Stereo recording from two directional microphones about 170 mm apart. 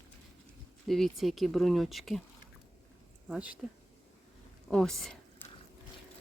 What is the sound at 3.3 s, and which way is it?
Speech, 5° right (ahead or behind).